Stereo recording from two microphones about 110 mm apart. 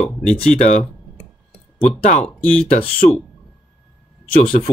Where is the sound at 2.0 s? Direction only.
90° left.